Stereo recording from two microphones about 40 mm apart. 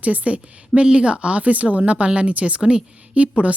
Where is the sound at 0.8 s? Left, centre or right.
Right.